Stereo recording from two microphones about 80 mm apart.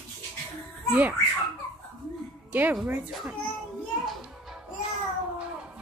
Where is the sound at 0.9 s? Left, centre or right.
Right.